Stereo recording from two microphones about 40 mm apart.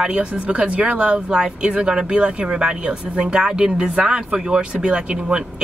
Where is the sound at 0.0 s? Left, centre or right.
Right.